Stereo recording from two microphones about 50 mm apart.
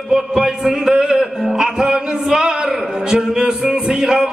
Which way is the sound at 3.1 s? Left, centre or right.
Centre.